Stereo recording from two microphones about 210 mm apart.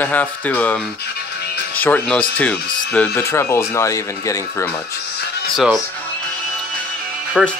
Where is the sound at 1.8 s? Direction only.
5° left (ahead or behind).